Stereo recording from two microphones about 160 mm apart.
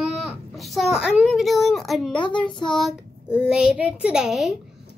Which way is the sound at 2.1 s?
30° left (ahead or behind).